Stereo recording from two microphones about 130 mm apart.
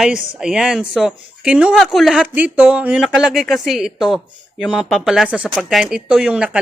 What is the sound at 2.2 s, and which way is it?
A woman's voice, 10° right (ahead or behind).